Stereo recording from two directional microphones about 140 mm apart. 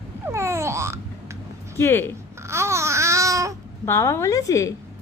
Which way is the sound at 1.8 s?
15° left (ahead or behind).